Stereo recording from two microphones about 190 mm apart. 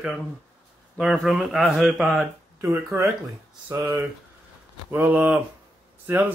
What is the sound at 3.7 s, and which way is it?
Speech, 15° right (ahead or behind).